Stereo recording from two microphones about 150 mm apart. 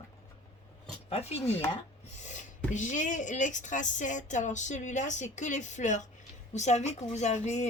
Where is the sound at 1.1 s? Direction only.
45° left (ahead or behind).